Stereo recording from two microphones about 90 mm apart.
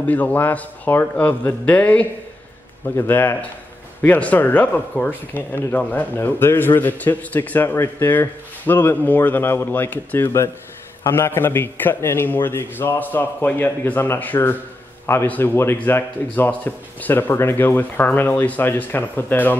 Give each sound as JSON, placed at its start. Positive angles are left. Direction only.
{"t": 0.0, "sound": "speech", "side_deg": 15}
{"t": 2.8, "sound": "speech", "side_deg": 25}